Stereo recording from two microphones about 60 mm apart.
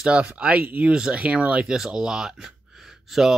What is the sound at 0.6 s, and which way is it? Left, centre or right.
Speech, right.